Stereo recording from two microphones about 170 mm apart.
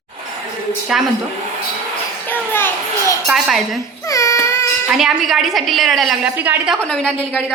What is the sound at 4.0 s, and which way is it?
Baby cry, 20° left (ahead or behind).